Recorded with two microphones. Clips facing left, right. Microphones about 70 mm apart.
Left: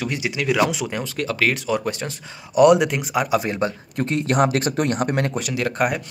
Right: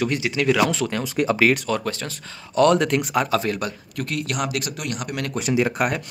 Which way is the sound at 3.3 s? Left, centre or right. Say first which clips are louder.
Left 2 dB; centre.